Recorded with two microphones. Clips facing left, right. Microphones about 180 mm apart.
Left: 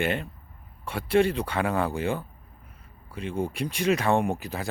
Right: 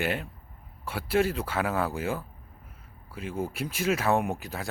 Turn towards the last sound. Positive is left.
turn(degrees=0)  # may be behind; listen again after turning